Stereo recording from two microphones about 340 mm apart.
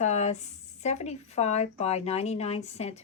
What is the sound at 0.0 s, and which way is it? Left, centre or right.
Speech, centre.